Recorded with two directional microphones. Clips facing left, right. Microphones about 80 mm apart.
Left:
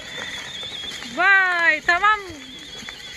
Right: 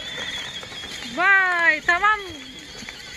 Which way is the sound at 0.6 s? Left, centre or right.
Centre.